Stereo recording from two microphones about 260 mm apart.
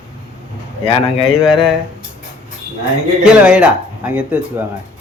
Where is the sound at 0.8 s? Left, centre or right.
Left.